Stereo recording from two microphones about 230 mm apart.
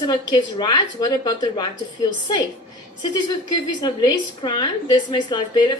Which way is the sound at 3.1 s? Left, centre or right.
Centre.